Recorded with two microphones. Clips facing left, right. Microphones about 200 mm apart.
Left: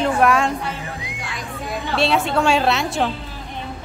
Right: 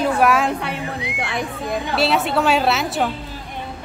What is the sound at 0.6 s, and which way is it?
Music, 70° right (ahead or behind).